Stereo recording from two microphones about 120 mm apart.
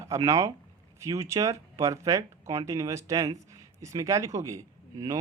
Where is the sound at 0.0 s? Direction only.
25° right (ahead or behind).